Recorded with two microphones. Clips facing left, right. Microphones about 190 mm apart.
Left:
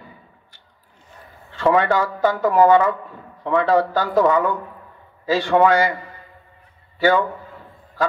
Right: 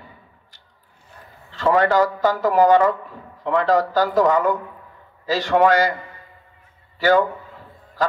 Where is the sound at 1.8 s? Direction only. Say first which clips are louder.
Right 2 dB; 40° right (ahead or behind).